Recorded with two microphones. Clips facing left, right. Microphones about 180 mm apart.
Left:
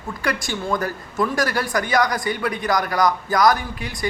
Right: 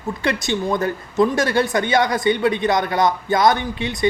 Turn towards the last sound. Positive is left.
turn(degrees=-25)  # may be behind; listen again after turning